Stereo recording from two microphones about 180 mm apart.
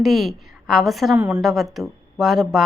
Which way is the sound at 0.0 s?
Centre (ahead or behind).